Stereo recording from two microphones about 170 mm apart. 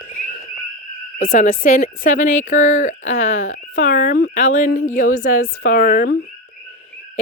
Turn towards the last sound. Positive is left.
turn(degrees=55)  # may be behind; listen again after turning